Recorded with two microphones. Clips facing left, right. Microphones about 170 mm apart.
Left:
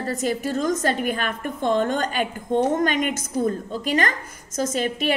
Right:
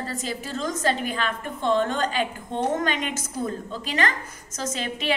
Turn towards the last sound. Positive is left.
turn(degrees=50)  # may be behind; listen again after turning